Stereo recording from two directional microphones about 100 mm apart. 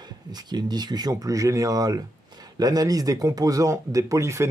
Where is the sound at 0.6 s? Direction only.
45° right (ahead or behind).